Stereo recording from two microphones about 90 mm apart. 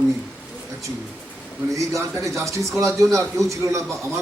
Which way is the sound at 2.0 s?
35° right (ahead or behind).